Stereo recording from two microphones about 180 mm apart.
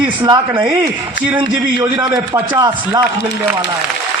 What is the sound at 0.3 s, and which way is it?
Speech, 20° right (ahead or behind).